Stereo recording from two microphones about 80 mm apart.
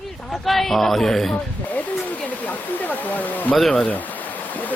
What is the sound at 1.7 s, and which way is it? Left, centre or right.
Speech, centre.